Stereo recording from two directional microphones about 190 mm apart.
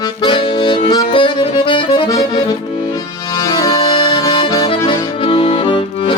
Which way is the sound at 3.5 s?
20° left (ahead or behind).